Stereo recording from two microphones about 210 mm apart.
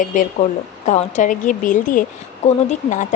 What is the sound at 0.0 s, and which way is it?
Speech, 35° left (ahead or behind).